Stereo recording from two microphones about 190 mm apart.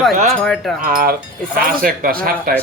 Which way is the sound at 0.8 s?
50° right (ahead or behind).